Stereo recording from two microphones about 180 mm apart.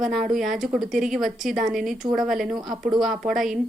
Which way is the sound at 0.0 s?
Centre (ahead or behind).